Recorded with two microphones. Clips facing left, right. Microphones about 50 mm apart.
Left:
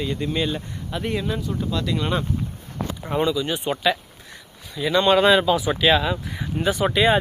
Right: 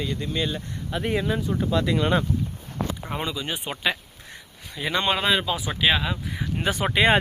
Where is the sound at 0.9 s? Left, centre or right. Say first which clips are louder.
Right 1 dB; centre.